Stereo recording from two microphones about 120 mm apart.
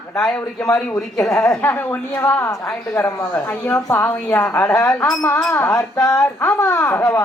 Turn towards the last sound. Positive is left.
turn(degrees=20)  # may be behind; listen again after turning